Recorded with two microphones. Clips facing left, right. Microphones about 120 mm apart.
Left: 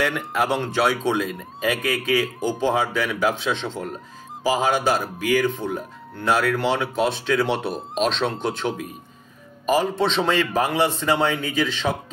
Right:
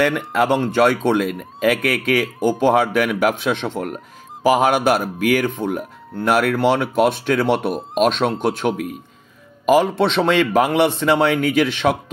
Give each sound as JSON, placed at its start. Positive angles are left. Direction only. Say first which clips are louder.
{"t": 0.0, "sound": "speech", "louder": "right 5 dB", "side_deg": -65}
{"t": 9.7, "sound": "speech", "louder": "right 5 dB", "side_deg": -75}